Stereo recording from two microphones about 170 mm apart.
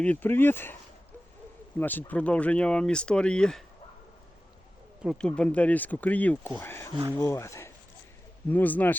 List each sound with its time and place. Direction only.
0.0 s speech: 10° left (ahead or behind)
1.8 s speech: 10° left (ahead or behind)
5.0 s speech: 5° left (ahead or behind)